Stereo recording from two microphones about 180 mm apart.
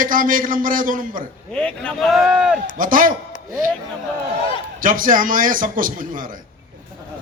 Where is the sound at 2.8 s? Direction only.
50° right (ahead or behind).